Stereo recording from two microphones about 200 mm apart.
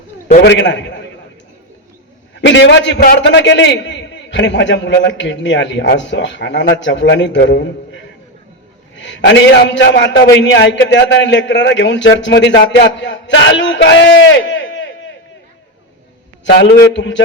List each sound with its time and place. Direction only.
0.4 s a man's voice: 60° left (ahead or behind)
2.4 s a man's voice: 60° left (ahead or behind)
16.9 s a man's voice: 65° left (ahead or behind)